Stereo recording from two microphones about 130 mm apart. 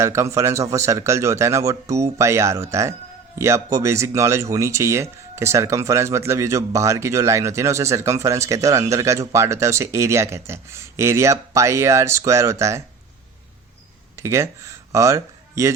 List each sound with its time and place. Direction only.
0.0 s speech: 20° right (ahead or behind)
14.2 s speech: 20° right (ahead or behind)